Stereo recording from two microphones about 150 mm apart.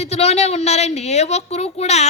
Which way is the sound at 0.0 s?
45° left (ahead or behind).